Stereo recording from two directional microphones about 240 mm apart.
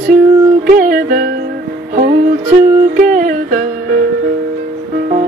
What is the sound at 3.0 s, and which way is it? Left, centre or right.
Music, right.